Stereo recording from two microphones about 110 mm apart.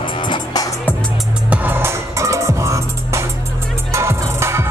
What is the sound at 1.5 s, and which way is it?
Music, 15° right (ahead or behind).